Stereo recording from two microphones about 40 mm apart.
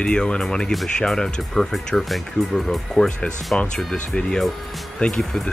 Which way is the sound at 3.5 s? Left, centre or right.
Left.